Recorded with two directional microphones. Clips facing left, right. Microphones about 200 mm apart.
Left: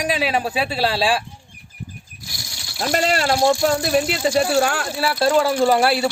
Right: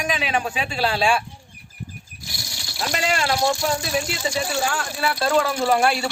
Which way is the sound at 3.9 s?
60° left (ahead or behind).